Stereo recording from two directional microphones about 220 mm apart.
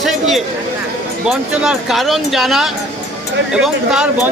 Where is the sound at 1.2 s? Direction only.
5° right (ahead or behind).